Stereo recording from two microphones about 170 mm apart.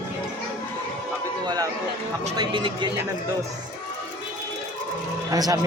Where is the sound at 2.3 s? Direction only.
25° right (ahead or behind).